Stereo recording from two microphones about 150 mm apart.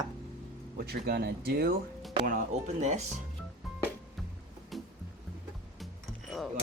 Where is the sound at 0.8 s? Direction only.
90° right.